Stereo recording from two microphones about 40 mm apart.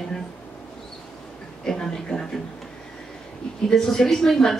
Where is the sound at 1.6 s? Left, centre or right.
Centre.